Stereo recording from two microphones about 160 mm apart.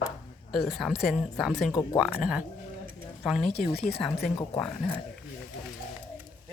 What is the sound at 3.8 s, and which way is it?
Speech, 40° left (ahead or behind).